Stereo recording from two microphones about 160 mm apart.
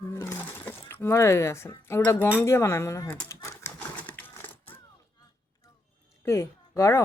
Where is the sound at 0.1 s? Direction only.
15° left (ahead or behind).